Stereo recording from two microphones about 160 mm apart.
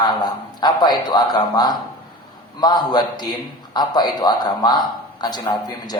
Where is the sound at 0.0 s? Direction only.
25° left (ahead or behind).